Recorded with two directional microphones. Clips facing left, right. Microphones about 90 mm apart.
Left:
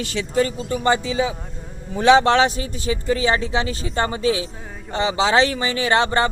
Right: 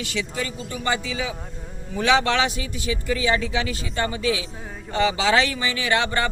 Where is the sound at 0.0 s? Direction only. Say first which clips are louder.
Left 7 dB; 40° left (ahead or behind).